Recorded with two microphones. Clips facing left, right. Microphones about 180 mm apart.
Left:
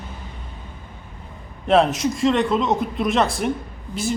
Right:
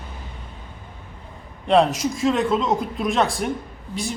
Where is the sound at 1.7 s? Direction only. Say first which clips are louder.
Left 1 dB; centre (ahead or behind).